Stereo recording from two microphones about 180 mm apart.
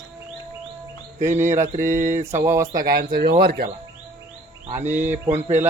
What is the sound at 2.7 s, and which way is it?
Speech, 50° right (ahead or behind).